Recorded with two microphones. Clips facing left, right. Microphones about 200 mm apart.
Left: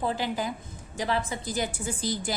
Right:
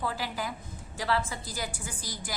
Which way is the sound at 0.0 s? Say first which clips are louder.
Left 5 dB; 20° left (ahead or behind).